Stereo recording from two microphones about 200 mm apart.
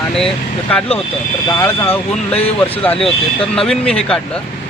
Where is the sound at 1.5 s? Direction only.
15° left (ahead or behind).